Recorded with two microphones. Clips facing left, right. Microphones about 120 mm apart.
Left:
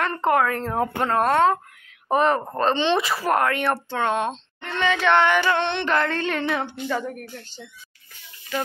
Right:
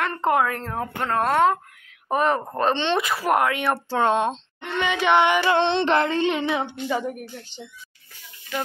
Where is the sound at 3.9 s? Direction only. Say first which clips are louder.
Right 3 dB; 30° right (ahead or behind).